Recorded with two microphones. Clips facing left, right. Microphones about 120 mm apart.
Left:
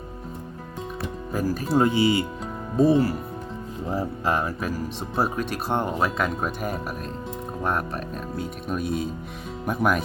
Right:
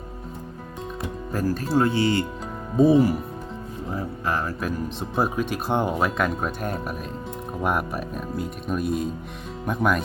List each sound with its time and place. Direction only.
1.3 s speech: 5° left (ahead or behind)
2.7 s speech: centre (ahead or behind)
3.8 s speech: 30° left (ahead or behind)
4.6 s speech: centre (ahead or behind)
7.6 s speech: 10° right (ahead or behind)